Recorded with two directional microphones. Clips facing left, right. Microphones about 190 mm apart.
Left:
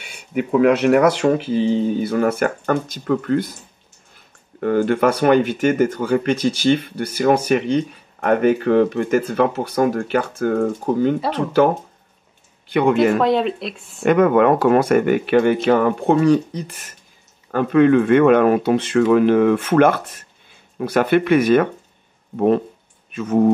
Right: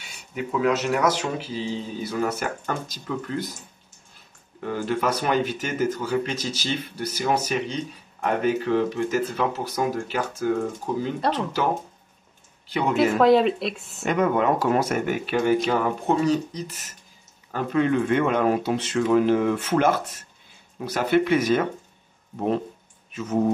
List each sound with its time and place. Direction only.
0.0 s speech: 60° left (ahead or behind)
4.6 s speech: 60° left (ahead or behind)
13.2 s speech: centre (ahead or behind)
14.0 s speech: 60° left (ahead or behind)
23.1 s speech: 60° left (ahead or behind)